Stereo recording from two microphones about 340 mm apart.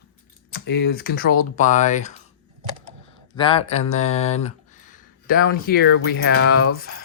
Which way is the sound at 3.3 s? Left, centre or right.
Centre.